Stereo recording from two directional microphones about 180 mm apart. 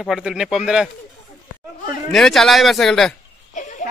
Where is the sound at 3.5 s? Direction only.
45° left (ahead or behind).